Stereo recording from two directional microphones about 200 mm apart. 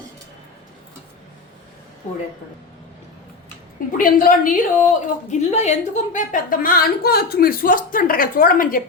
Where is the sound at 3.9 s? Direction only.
45° left (ahead or behind).